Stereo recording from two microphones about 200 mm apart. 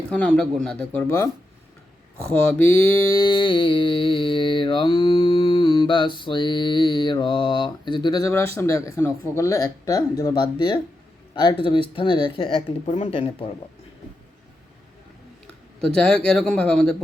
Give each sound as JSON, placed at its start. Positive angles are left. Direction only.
{"t": 0.1, "sound": "speech", "side_deg": 5}
{"t": 2.3, "sound": "mantra", "side_deg": 10}
{"t": 8.5, "sound": "speech", "side_deg": 15}
{"t": 11.3, "sound": "mantra", "side_deg": 25}
{"t": 16.0, "sound": "speech", "side_deg": 5}